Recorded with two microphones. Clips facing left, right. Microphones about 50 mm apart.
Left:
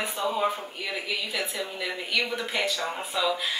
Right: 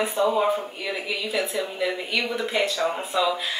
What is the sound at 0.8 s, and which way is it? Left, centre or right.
Speech, centre.